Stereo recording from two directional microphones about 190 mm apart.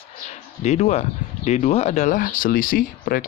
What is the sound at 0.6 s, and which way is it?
Speech, 35° left (ahead or behind).